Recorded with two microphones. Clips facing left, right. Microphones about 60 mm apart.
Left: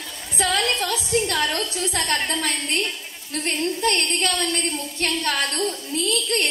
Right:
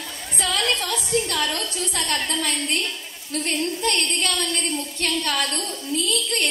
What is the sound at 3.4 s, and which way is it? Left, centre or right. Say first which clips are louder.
A woman's voice: left 2 dB; left.